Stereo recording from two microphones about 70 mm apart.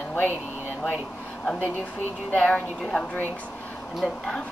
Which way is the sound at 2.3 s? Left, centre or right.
Centre.